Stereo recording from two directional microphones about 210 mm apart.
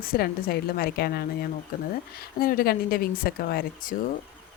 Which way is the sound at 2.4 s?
45° left (ahead or behind).